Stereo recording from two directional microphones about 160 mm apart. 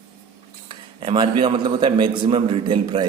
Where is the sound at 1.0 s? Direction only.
35° right (ahead or behind).